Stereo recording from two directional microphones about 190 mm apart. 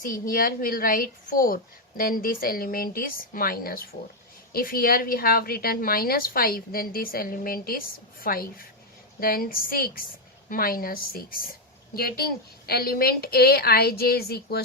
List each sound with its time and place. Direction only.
0.1 s a woman's voice: 50° left (ahead or behind)